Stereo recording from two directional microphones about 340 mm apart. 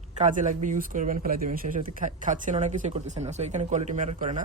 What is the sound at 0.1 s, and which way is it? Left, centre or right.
A woman's voice, right.